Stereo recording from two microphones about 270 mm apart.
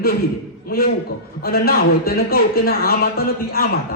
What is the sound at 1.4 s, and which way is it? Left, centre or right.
A man's voice, left.